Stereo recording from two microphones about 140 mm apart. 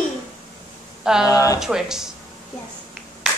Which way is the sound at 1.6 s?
5° right (ahead or behind).